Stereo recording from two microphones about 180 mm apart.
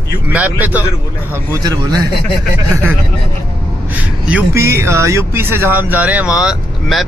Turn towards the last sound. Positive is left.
turn(degrees=0)  # may be behind; listen again after turning